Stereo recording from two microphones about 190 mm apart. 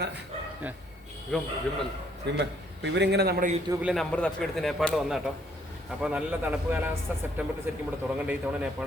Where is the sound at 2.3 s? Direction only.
65° right (ahead or behind).